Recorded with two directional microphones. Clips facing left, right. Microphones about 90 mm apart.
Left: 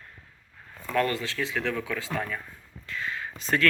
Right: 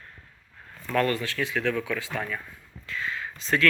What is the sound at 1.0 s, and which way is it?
Speech, 25° left (ahead or behind).